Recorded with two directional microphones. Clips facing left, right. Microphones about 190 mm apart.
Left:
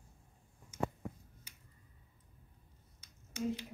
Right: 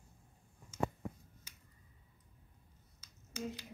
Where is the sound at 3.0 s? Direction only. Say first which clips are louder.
Left 5 dB; 25° left (ahead or behind).